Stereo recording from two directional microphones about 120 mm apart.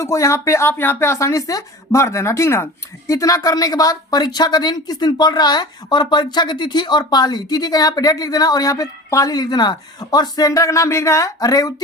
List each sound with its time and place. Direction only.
0.0 s speech: 25° left (ahead or behind)